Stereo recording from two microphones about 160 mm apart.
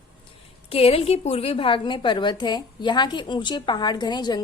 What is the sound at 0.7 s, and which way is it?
A woman's voice, 35° left (ahead or behind).